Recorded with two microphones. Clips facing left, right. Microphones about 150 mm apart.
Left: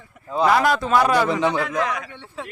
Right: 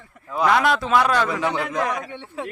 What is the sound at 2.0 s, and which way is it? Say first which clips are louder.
Speech: right 3 dB; 20° right (ahead or behind).